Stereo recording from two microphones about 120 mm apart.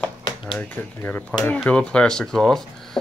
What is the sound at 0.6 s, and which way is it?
Speech, 15° left (ahead or behind).